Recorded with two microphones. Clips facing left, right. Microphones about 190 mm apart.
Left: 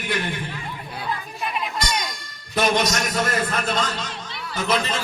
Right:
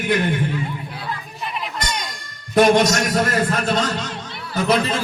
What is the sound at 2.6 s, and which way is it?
Speech, 50° right (ahead or behind).